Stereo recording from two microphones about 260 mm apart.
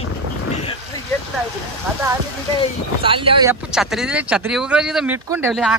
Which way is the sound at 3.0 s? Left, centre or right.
Centre.